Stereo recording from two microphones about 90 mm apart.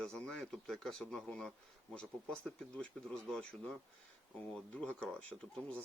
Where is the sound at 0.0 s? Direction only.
5° left (ahead or behind).